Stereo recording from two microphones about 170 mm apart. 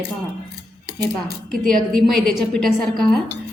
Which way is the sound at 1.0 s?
70° right (ahead or behind).